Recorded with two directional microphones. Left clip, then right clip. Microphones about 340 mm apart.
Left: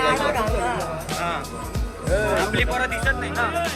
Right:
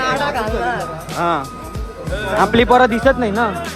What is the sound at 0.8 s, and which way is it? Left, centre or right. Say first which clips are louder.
Music: right 5 dB; centre.